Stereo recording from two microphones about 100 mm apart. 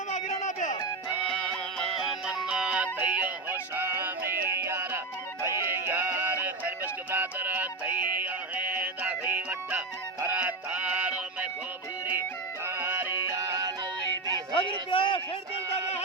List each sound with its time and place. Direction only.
1.3 s music: 5° left (ahead or behind); by 11.1 s 15° right (ahead or behind)
12.6 s music: 25° right (ahead or behind)
14.5 s a sound: 60° left (ahead or behind)